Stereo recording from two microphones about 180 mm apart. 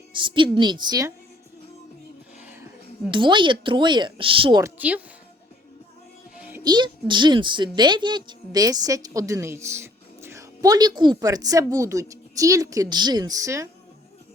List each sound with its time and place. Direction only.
0.1 s a woman's voice: 25° right (ahead or behind)
3.1 s a woman's voice: 25° right (ahead or behind)
4.6 s a woman's voice: 10° right (ahead or behind)
6.3 s music: 5° right (ahead or behind)
6.6 s a woman's voice: 25° right (ahead or behind)